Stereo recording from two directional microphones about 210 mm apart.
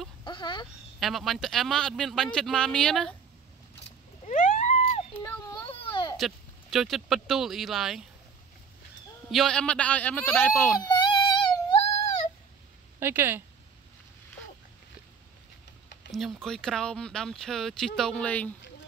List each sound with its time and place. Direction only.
0.2 s speech: 20° left (ahead or behind)
0.9 s speech: centre (ahead or behind)
4.3 s a sound: 35° left (ahead or behind)
6.1 s speech: centre (ahead or behind)
9.3 s speech: centre (ahead or behind)
10.9 s music: 20° left (ahead or behind)
13.0 s a woman's voice: 10° right (ahead or behind)
16.1 s speech: centre (ahead or behind)